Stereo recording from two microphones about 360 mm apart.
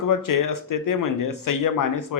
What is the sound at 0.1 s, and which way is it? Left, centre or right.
A man's voice, left.